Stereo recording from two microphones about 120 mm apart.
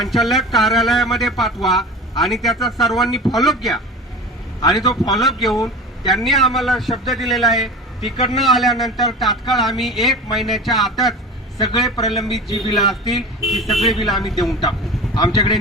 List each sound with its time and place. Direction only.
0.0 s speech: centre (ahead or behind)
4.9 s speech: centre (ahead or behind)
11.5 s a man's voice: 35° left (ahead or behind)
12.0 s speech: centre (ahead or behind)
12.5 s speech: 40° left (ahead or behind)
12.8 s speech: centre (ahead or behind)
14.6 s speech: 40° left (ahead or behind)